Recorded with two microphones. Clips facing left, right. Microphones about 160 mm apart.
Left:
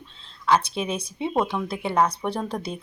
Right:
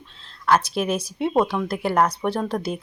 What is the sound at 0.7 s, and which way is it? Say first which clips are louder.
Speech: right 4 dB; 5° right (ahead or behind).